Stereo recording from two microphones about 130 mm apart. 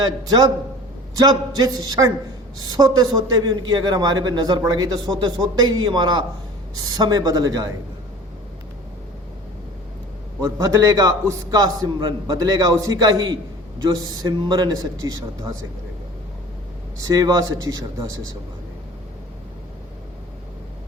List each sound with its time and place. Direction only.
0.0 s a man's voice: 30° right (ahead or behind)
10.4 s a man's voice: 25° right (ahead or behind)
17.0 s a man's voice: 25° right (ahead or behind)